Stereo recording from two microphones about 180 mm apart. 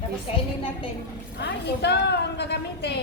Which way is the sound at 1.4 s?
65° left (ahead or behind).